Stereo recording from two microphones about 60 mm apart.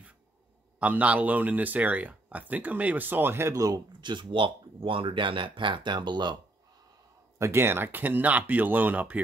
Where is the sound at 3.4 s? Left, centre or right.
Right.